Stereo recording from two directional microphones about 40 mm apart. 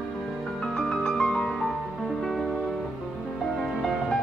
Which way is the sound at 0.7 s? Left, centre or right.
Centre.